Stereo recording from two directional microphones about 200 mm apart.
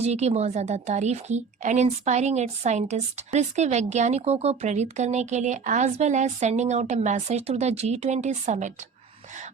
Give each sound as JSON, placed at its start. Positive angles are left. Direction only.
{"t": 0.0, "sound": "a woman's voice", "side_deg": -35}